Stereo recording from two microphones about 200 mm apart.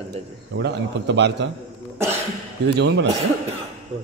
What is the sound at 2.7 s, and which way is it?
Speech, 55° right (ahead or behind).